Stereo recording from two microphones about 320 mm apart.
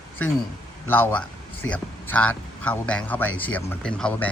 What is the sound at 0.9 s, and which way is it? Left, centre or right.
A man's voice, centre.